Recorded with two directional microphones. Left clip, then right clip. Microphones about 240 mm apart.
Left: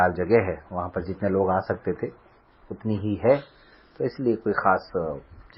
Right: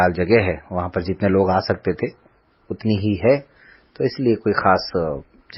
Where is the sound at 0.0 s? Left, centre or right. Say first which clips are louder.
Right 4 dB; right.